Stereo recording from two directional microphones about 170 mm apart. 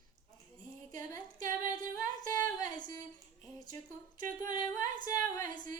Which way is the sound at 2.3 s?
20° left (ahead or behind).